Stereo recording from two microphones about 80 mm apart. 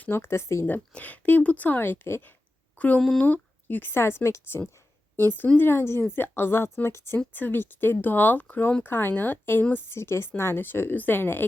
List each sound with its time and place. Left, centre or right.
0.0 s speech: left
0.7 s speech: centre
2.7 s speech: centre